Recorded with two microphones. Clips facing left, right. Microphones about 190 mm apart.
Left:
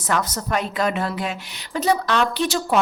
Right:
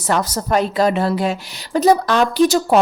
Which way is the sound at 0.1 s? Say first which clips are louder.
Right 5 dB; 35° right (ahead or behind).